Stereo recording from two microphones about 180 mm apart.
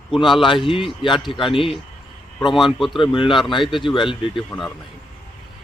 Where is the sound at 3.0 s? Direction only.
25° left (ahead or behind).